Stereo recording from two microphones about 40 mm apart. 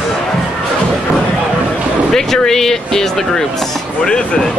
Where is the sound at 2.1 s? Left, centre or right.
Centre.